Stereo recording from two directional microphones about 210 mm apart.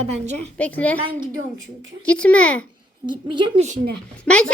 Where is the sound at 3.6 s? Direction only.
45° right (ahead or behind).